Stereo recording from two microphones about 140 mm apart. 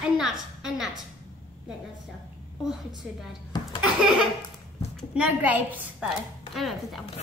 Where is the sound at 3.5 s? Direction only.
35° left (ahead or behind).